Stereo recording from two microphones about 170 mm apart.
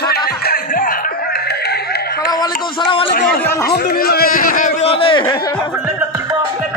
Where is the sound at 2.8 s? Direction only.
30° left (ahead or behind).